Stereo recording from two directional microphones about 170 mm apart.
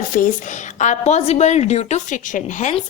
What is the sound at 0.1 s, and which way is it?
A woman's voice, 50° left (ahead or behind).